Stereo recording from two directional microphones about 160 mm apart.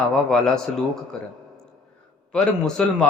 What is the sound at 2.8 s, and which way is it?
Speech, 5° left (ahead or behind).